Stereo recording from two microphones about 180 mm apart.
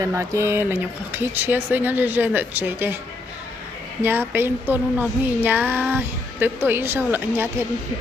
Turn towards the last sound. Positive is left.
turn(degrees=-10)  # may be behind; listen again after turning